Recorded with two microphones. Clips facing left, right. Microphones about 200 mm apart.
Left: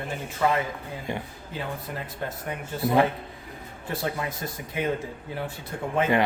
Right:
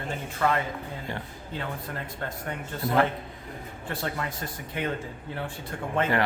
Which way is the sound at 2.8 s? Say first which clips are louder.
Left 3 dB; 15° left (ahead or behind).